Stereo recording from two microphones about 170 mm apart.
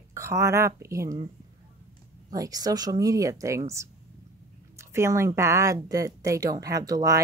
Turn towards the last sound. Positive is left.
turn(degrees=-20)  # may be behind; listen again after turning